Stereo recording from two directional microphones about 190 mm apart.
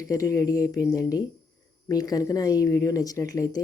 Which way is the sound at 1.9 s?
20° left (ahead or behind).